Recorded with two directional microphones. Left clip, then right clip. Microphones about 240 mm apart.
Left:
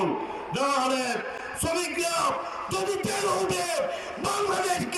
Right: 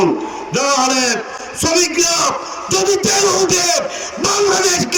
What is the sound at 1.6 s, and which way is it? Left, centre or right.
A man's voice, right.